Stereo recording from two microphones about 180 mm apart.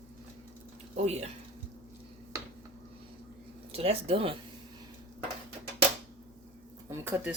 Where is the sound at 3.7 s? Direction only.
30° right (ahead or behind).